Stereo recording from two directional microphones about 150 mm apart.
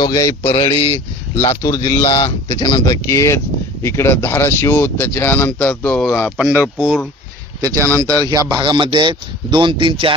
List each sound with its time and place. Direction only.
0.0 s speech: 25° left (ahead or behind)
0.6 s speech: 40° left (ahead or behind)
1.3 s speech: 20° left (ahead or behind)
2.1 s speech: 30° left (ahead or behind); by 6.3 s 5° left (ahead or behind)
6.3 s speech: 10° right (ahead or behind)
8.2 s speech: 25° right (ahead or behind)